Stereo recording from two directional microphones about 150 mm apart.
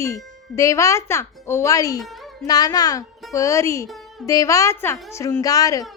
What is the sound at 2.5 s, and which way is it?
A woman's voice, 25° left (ahead or behind).